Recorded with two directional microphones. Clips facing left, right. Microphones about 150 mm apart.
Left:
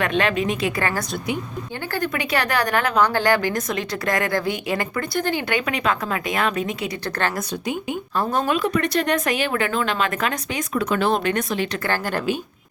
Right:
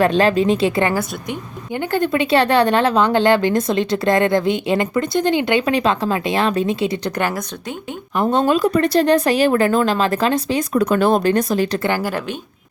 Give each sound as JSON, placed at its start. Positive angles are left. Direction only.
{"t": 0.0, "sound": "speech", "side_deg": -35}
{"t": 1.9, "sound": "speech", "side_deg": -25}
{"t": 8.1, "sound": "speech", "side_deg": -25}
{"t": 10.8, "sound": "speech", "side_deg": -40}
{"t": 11.8, "sound": "speech", "side_deg": -15}